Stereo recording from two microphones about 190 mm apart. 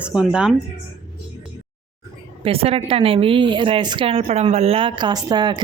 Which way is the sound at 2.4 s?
30° right (ahead or behind).